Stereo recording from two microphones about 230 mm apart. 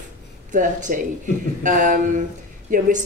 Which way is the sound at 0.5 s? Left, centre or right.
Right.